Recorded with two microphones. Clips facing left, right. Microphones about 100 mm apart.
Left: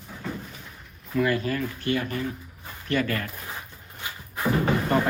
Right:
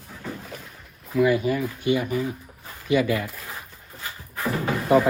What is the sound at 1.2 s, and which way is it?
Speech, 15° right (ahead or behind).